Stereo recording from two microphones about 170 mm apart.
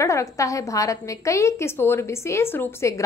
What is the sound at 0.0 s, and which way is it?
A woman's voice, 20° left (ahead or behind).